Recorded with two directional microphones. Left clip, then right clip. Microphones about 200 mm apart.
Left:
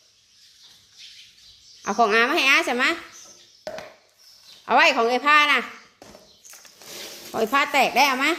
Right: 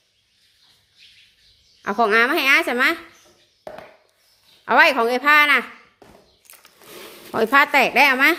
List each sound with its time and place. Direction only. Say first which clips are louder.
1.8 s speech: right 2 dB; 25° right (ahead or behind)
3.7 s a sound: left 2 dB; centre (ahead or behind)
4.6 s speech: right 3 dB; 30° right (ahead or behind)
7.3 s speech: right 5 dB; 40° right (ahead or behind)